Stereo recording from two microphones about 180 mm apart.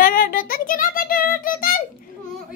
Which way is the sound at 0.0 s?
55° left (ahead or behind).